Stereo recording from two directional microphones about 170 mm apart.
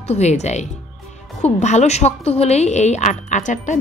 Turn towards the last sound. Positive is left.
turn(degrees=45)  # may be behind; listen again after turning